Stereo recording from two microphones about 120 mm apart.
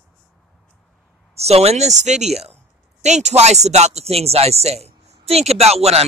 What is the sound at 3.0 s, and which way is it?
Speech, 70° right (ahead or behind).